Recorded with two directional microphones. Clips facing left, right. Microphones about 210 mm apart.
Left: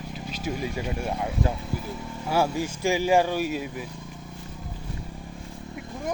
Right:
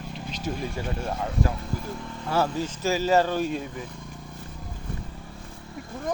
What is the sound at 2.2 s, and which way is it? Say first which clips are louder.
Speech: left 1 dB; 10° left (ahead or behind).